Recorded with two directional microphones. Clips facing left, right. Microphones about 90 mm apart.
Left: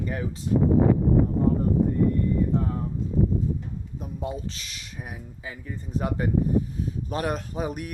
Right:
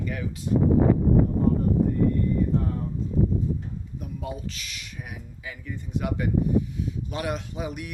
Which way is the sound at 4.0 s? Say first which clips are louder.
Left 2 dB; 30° left (ahead or behind).